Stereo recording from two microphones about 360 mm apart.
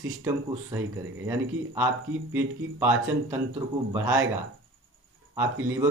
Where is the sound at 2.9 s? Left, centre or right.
Right.